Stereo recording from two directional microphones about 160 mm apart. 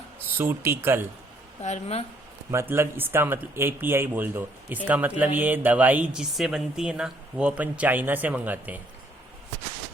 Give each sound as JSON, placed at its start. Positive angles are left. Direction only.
{"t": 0.3, "sound": "speech", "side_deg": -15}
{"t": 1.6, "sound": "speech", "side_deg": 45}
{"t": 2.5, "sound": "speech", "side_deg": -15}